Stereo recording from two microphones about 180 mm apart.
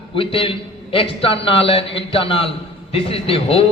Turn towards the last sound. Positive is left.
turn(degrees=30)  # may be behind; listen again after turning